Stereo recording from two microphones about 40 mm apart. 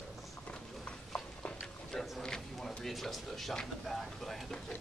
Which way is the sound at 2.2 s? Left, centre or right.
Centre.